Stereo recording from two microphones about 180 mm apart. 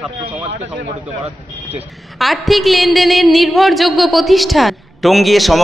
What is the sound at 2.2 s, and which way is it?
A woman's voice, centre (ahead or behind).